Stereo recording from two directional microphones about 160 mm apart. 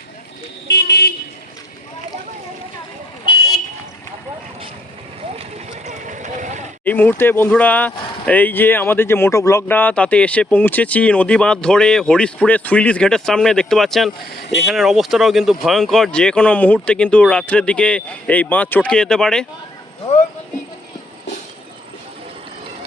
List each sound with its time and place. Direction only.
0.7 s vehicle: 90° left
5.4 s vehicle: 50° right (ahead or behind)
6.8 s speech: 10° left (ahead or behind)